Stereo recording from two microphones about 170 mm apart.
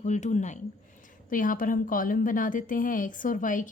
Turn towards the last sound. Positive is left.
turn(degrees=50)  # may be behind; listen again after turning